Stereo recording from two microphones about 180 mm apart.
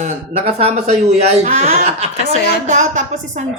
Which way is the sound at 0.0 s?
35° right (ahead or behind).